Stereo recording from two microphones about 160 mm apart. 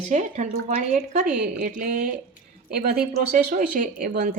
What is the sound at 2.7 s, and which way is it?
Speech, 75° right (ahead or behind).